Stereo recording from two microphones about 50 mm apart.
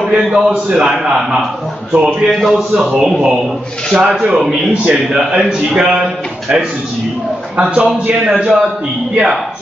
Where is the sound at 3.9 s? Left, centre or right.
Right.